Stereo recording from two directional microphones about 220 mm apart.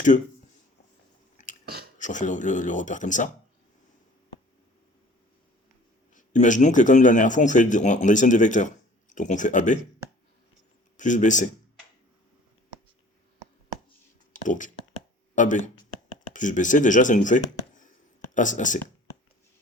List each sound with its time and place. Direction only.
1.6 s a sound: 45° right (ahead or behind)
2.0 s speech: 35° left (ahead or behind)
6.1 s speech: 35° left (ahead or behind)
10.9 s speech: 35° left (ahead or behind)
14.3 s a sound: 35° left (ahead or behind)
16.3 s speech: 35° left (ahead or behind)